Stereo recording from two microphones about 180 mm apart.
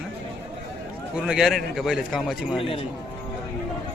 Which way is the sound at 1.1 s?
5° right (ahead or behind).